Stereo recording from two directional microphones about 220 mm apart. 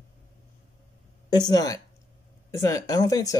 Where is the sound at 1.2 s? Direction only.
20° left (ahead or behind).